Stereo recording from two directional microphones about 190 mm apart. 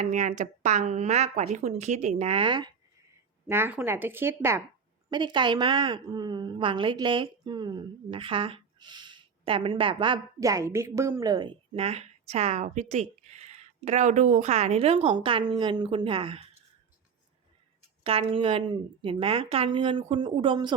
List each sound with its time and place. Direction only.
0.0 s a woman's voice: 40° right (ahead or behind)
3.4 s speech: 10° right (ahead or behind)
5.1 s a woman's voice: 25° right (ahead or behind)
18.0 s a woman's voice: 30° right (ahead or behind)